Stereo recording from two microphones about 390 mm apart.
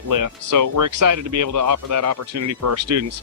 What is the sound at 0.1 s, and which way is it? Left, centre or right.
Speech, right.